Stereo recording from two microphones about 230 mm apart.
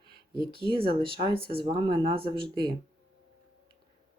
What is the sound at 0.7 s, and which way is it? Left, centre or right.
Speech, right.